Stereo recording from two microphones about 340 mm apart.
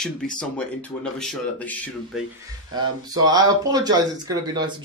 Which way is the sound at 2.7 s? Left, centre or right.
Centre.